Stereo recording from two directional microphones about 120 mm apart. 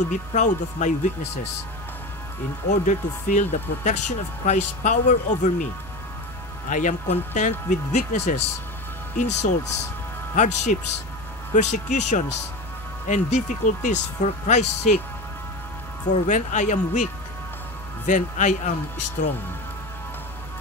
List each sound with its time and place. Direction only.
0.0 s speech: 90° left
2.7 s speech: 90° left
6.7 s speech: 90° left
16.1 s speech: 90° left